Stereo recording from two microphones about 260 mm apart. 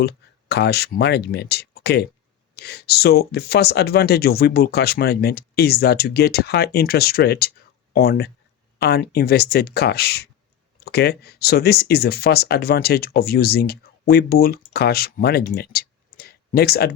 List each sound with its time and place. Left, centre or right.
0.0 s speech: left